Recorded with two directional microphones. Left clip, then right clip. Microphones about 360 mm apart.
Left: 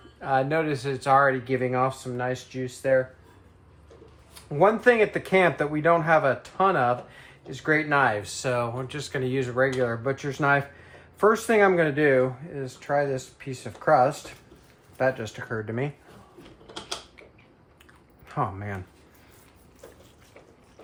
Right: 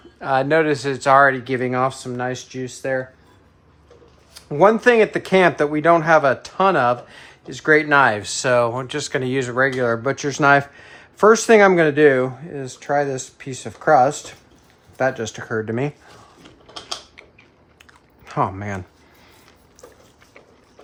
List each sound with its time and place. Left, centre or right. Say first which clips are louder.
0.2 s speech: right 7 dB; right
4.5 s speech: right 6 dB; right
18.3 s speech: right 7 dB; right